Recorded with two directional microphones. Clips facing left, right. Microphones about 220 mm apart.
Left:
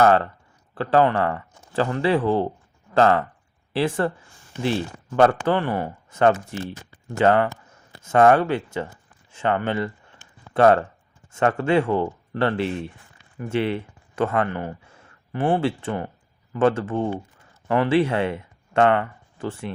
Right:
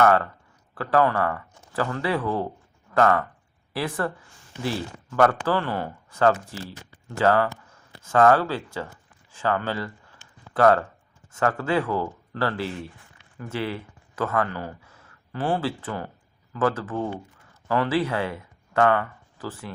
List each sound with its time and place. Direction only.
0.0 s speech: 25° left (ahead or behind)
9.3 s a sound: 20° left (ahead or behind)
11.3 s speech: 25° left (ahead or behind)